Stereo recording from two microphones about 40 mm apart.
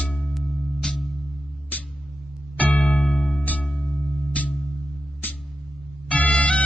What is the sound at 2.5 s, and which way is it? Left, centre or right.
Music, left.